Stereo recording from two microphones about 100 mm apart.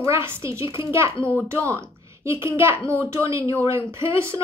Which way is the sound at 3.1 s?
30° right (ahead or behind).